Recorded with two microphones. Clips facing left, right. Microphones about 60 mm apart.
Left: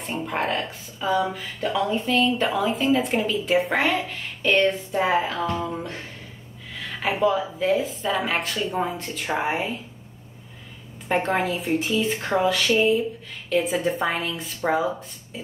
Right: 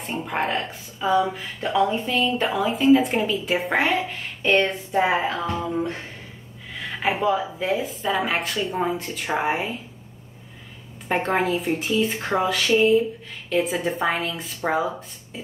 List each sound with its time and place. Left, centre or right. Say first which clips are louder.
0.0 s a woman's voice: right 1 dB; centre
0.7 s music: right 2 dB; right
1.3 s a woman's voice: right 2 dB; centre
4.0 s music: even; right
6.7 s a woman's voice: right 2 dB; centre
11.1 s a woman's voice: right 1 dB; centre